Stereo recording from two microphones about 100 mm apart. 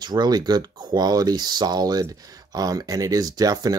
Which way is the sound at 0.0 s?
45° right (ahead or behind).